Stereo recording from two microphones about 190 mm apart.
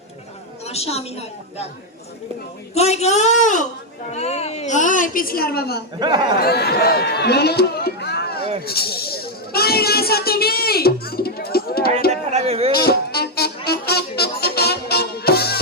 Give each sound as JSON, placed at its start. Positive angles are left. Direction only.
{"t": 0.7, "sound": "a woman's voice", "side_deg": 35}
{"t": 2.7, "sound": "a woman's voice", "side_deg": 35}
{"t": 6.0, "sound": "speech", "side_deg": -20}
{"t": 6.4, "sound": "speech", "side_deg": 55}
{"t": 8.6, "sound": "a sound", "side_deg": 55}
{"t": 12.1, "sound": "a sound", "side_deg": -35}
{"t": 12.7, "sound": "music", "side_deg": 55}